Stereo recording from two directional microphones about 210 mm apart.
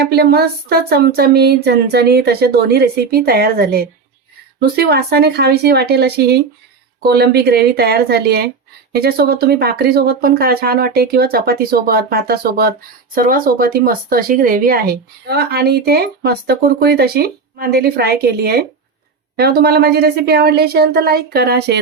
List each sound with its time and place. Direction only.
0.1 s speech: 50° right (ahead or behind)